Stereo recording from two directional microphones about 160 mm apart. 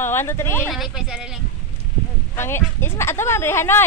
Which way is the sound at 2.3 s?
15° left (ahead or behind).